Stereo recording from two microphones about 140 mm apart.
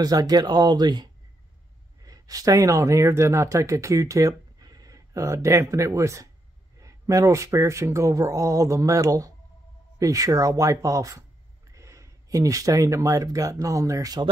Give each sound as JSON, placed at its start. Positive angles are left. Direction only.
{"t": 0.0, "sound": "speech", "side_deg": -25}